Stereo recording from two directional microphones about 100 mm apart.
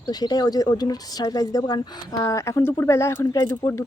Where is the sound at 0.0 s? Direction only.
40° left (ahead or behind).